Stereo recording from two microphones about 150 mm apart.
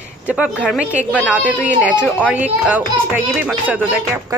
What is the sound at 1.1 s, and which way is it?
Speech, 10° left (ahead or behind).